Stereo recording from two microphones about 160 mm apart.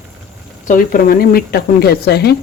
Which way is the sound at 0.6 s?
60° left (ahead or behind).